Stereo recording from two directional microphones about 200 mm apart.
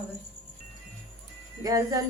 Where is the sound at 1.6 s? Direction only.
20° right (ahead or behind).